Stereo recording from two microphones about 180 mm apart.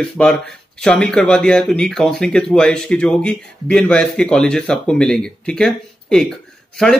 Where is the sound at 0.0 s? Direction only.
5° left (ahead or behind).